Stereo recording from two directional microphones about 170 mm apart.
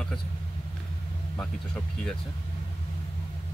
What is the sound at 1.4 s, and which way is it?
Speech, 5° left (ahead or behind).